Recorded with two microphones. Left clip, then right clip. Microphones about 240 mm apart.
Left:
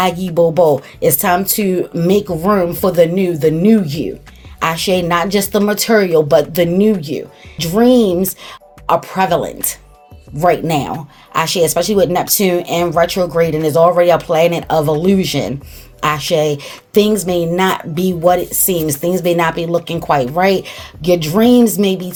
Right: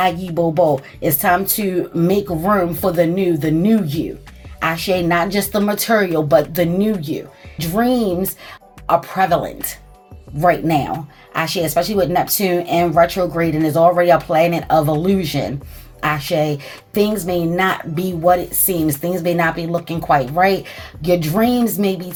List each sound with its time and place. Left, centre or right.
0.0 s a woman's voice: left